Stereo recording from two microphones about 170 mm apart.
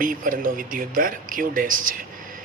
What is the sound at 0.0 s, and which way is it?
A man's voice, 55° right (ahead or behind).